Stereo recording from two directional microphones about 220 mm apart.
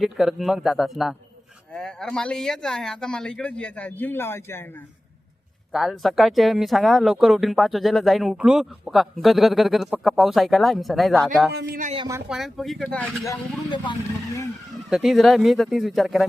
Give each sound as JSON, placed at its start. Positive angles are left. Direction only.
{"t": 0.0, "sound": "speech", "side_deg": 0}
{"t": 5.7, "sound": "speech", "side_deg": 0}
{"t": 11.5, "sound": "speech", "side_deg": -45}
{"t": 12.3, "sound": "speech", "side_deg": 0}
{"t": 14.8, "sound": "speech", "side_deg": 0}